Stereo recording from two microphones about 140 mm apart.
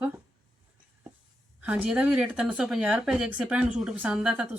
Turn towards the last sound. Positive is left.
turn(degrees=-5)  # may be behind; listen again after turning